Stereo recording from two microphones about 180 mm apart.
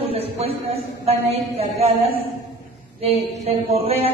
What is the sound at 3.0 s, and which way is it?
A man's voice, 35° right (ahead or behind).